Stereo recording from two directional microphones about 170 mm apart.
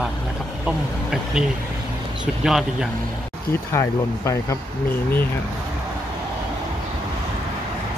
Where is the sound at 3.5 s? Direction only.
15° left (ahead or behind).